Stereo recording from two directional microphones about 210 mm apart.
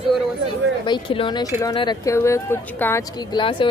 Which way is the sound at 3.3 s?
25° left (ahead or behind).